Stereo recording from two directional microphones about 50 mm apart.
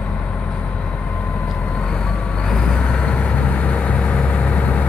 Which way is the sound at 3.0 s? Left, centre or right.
Left.